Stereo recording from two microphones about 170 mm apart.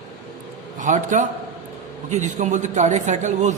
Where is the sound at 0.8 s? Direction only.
45° right (ahead or behind).